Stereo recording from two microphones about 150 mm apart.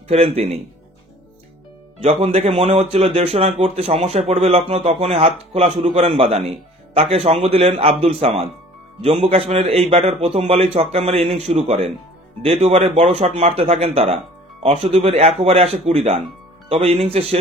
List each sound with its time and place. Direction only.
0.1 s speech: 45° right (ahead or behind)
2.0 s a man's voice: 45° right (ahead or behind)